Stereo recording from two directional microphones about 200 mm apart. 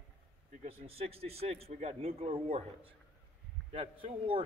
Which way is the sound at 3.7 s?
30° right (ahead or behind).